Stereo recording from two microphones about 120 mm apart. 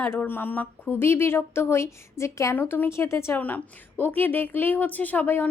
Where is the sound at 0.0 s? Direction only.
15° left (ahead or behind).